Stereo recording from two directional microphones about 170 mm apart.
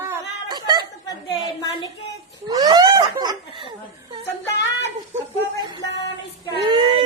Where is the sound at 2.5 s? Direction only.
20° right (ahead or behind).